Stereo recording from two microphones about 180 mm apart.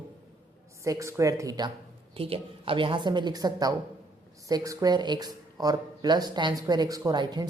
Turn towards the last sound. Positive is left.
turn(degrees=-25)  # may be behind; listen again after turning